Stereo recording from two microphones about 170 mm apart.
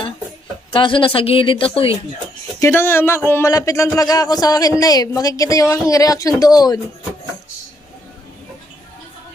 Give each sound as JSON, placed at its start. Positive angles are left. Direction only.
{"t": 0.7, "sound": "speech", "side_deg": 30}
{"t": 2.6, "sound": "speech", "side_deg": 15}